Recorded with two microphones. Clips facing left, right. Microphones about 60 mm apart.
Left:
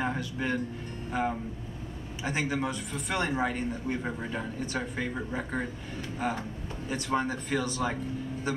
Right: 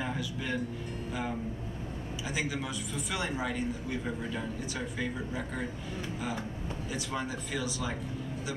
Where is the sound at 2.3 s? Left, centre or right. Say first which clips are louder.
Left 5 dB; left.